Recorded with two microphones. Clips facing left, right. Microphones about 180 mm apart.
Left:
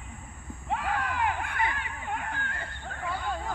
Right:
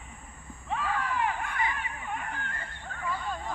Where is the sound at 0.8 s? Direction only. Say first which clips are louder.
Even; 65° left (ahead or behind).